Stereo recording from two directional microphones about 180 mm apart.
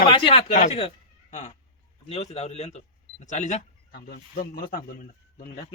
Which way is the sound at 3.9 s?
60° left (ahead or behind).